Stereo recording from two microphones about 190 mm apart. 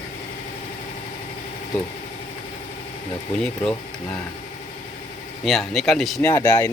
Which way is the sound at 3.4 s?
5° left (ahead or behind).